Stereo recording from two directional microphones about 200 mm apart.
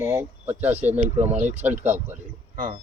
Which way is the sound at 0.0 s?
10° right (ahead or behind).